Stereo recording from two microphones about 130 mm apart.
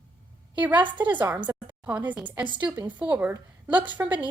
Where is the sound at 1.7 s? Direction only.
10° right (ahead or behind).